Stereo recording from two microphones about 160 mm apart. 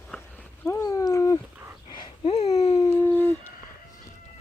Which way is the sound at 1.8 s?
30° left (ahead or behind).